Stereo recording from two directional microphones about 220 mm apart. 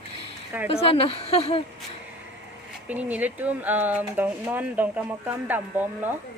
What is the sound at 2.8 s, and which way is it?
Speech, 5° right (ahead or behind).